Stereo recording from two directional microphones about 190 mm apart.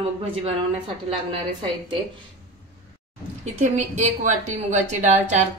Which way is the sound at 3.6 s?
40° right (ahead or behind).